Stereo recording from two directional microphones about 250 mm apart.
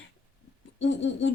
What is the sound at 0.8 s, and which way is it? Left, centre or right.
Speech, left.